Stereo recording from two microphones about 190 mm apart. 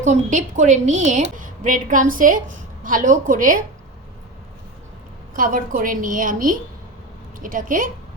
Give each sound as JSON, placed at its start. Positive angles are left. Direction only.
{"t": 0.0, "sound": "a woman's voice", "side_deg": -40}
{"t": 5.4, "sound": "a woman's voice", "side_deg": -45}